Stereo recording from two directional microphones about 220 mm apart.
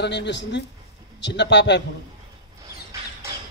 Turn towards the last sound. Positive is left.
turn(degrees=-15)  # may be behind; listen again after turning